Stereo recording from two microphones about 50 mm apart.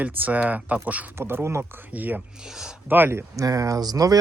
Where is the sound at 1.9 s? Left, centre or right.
Right.